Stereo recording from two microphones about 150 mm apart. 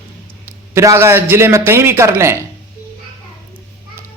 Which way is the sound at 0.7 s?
20° right (ahead or behind).